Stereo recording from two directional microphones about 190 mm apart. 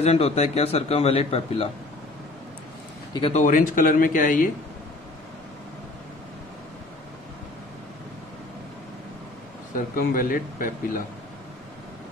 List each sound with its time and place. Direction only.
0.0 s a man's voice: 35° left (ahead or behind)
3.1 s a man's voice: 30° left (ahead or behind)
9.9 s a man's voice: 45° left (ahead or behind)